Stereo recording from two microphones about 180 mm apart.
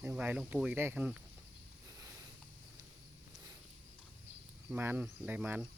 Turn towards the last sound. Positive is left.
turn(degrees=-10)  # may be behind; listen again after turning